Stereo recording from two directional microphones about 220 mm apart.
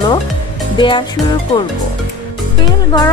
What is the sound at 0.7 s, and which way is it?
Music, 20° left (ahead or behind).